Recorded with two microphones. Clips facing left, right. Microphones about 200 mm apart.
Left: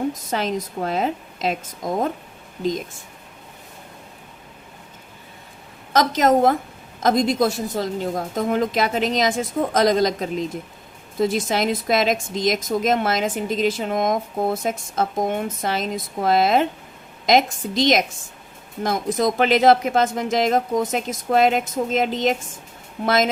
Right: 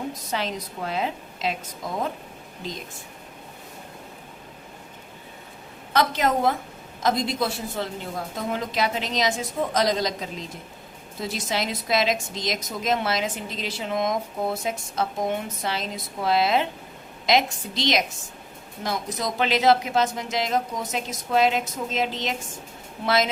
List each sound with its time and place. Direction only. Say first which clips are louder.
0.1 s a woman's voice: left 5 dB; 45° left (ahead or behind)
5.9 s a woman's voice: left 5 dB; 40° left (ahead or behind)
11.3 s a woman's voice: left 2 dB; 50° left (ahead or behind)
19.1 s a woman's voice: left 7 dB; 50° left (ahead or behind)